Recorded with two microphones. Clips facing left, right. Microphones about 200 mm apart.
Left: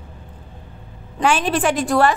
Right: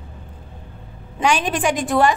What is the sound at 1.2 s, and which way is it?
Speech, 5° left (ahead or behind).